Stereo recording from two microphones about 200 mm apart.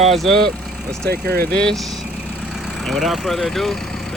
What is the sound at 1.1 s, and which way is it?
Speech, 50° right (ahead or behind).